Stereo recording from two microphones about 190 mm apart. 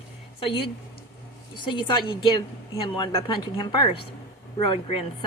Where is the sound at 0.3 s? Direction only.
30° left (ahead or behind).